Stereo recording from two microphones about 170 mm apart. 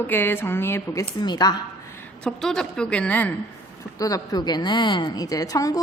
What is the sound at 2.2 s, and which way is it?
A woman's voice, 5° left (ahead or behind).